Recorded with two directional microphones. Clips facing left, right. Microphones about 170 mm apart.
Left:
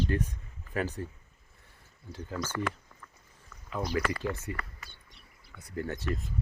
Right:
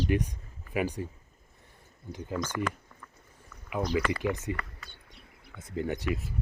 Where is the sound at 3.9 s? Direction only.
20° right (ahead or behind).